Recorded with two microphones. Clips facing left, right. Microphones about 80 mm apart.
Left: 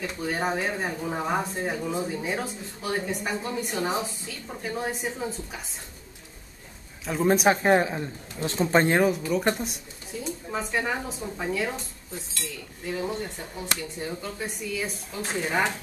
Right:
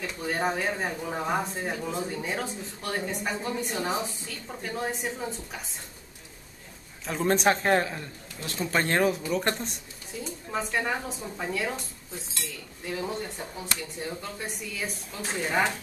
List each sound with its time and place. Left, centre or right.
0.0 s speech: centre
7.1 s speech: centre; by 8.9 s left
8.9 s speech: centre
12.8 s speech: centre